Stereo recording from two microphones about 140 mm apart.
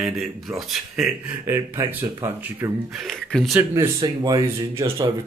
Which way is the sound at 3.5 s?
20° right (ahead or behind).